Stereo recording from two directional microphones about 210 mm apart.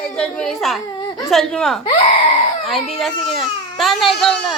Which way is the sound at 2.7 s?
Centre (ahead or behind).